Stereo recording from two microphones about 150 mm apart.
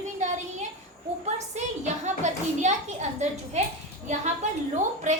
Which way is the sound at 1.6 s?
50° right (ahead or behind).